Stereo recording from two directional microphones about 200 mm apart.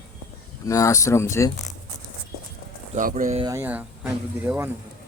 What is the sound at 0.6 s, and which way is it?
Speech, 15° left (ahead or behind).